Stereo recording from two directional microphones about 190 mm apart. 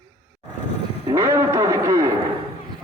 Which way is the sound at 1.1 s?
15° right (ahead or behind).